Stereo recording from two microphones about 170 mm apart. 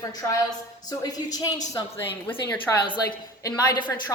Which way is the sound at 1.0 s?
20° left (ahead or behind).